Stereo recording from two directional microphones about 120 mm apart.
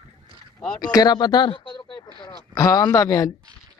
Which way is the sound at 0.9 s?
35° left (ahead or behind).